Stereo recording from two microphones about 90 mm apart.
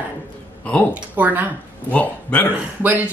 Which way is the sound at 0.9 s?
15° right (ahead or behind).